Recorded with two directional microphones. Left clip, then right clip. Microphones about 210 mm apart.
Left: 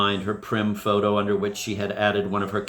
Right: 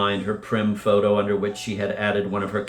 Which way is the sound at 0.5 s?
45° left (ahead or behind).